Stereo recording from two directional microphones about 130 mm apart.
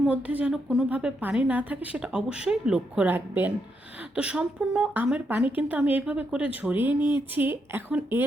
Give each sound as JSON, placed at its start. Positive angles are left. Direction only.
{"t": 0.0, "sound": "a woman's voice", "side_deg": -10}